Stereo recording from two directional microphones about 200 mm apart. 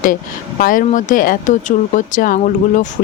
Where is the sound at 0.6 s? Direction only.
40° left (ahead or behind).